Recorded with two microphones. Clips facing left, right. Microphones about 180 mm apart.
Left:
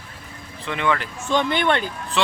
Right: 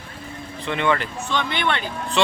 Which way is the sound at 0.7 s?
Centre (ahead or behind).